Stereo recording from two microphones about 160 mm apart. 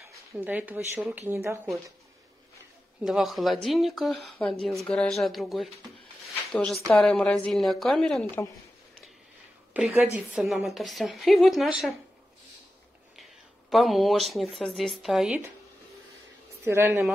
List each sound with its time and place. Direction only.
0.1 s speech: 15° right (ahead or behind)
3.0 s speech: centre (ahead or behind)
9.8 s speech: 10° right (ahead or behind)
13.1 s speech: centre (ahead or behind)
16.6 s speech: 15° right (ahead or behind)